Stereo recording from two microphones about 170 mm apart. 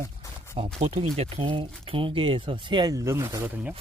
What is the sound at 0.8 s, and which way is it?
Speech, 35° right (ahead or behind).